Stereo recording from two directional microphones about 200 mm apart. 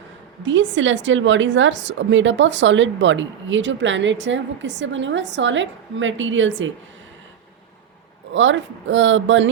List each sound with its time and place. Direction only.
0.4 s a woman's voice: 65° right (ahead or behind)
8.3 s a woman's voice: 65° right (ahead or behind)